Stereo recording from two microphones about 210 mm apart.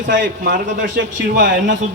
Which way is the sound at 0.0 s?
60° right (ahead or behind).